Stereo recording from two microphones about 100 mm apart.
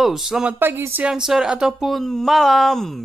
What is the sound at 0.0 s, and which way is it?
Speech, 5° right (ahead or behind).